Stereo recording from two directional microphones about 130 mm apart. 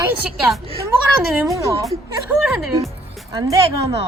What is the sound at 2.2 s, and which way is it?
Speech, centre (ahead or behind).